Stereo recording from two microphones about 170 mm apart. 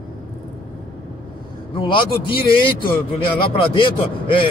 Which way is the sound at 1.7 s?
30° left (ahead or behind).